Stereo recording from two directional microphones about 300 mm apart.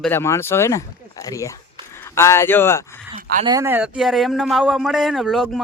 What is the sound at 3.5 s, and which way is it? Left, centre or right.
Speech, centre.